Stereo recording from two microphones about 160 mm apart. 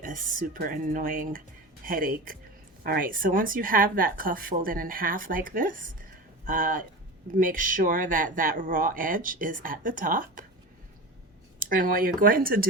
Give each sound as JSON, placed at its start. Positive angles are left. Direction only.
{"t": 0.0, "sound": "speech", "side_deg": -55}
{"t": 11.6, "sound": "speech", "side_deg": -60}